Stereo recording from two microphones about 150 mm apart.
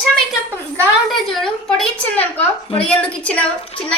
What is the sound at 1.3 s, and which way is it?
Speech, 5° left (ahead or behind).